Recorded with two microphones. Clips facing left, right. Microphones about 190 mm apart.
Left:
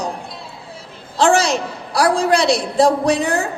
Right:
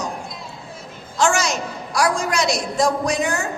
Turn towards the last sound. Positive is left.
turn(degrees=35)  # may be behind; listen again after turning